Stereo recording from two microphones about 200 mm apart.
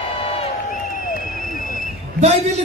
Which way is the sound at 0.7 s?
45° left (ahead or behind).